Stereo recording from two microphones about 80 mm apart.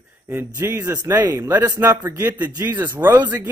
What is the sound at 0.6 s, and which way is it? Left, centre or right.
Speech, right.